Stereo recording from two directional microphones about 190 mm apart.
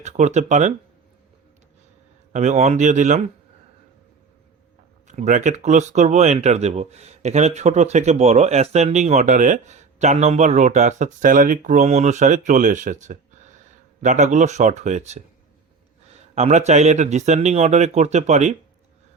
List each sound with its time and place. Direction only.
0.0 s speech: 35° right (ahead or behind)
2.3 s speech: 40° right (ahead or behind)
5.0 s speech: 40° right (ahead or behind)
16.2 s speech: 35° right (ahead or behind)